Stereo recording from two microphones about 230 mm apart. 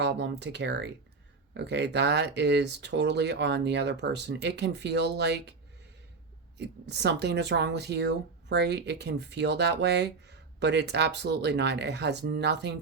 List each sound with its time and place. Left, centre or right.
0.0 s speech: right
6.6 s speech: right